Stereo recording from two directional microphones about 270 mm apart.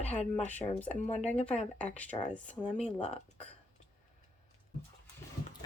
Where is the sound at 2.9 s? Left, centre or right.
Left.